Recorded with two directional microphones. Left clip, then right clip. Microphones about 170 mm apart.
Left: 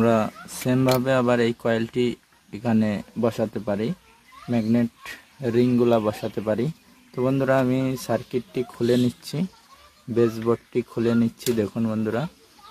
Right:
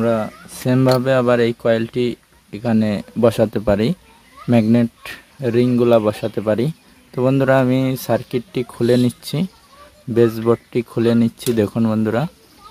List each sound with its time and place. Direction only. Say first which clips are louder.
0.0 s speech: right 2 dB; centre (ahead or behind)
0.7 s speech: right 5 dB; 15° right (ahead or behind); by 4.8 s 30° right (ahead or behind)
5.0 s speech: right 6 dB; 15° right (ahead or behind)